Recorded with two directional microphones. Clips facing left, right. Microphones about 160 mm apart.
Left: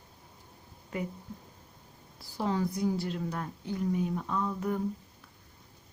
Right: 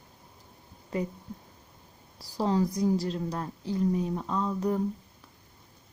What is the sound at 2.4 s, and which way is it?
A woman's voice, 35° right (ahead or behind).